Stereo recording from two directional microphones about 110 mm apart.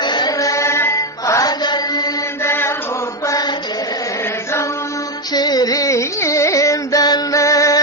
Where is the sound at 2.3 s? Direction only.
20° left (ahead or behind).